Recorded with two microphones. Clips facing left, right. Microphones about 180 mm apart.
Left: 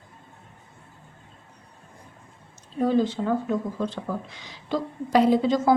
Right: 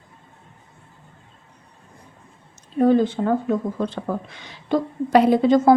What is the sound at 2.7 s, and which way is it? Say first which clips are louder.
A woman's voice: right 5 dB; 55° right (ahead or behind).